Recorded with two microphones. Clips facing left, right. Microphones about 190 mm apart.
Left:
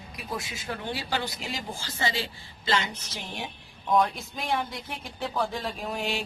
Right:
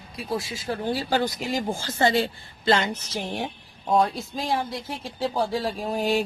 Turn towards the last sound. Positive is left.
turn(degrees=-40)  # may be behind; listen again after turning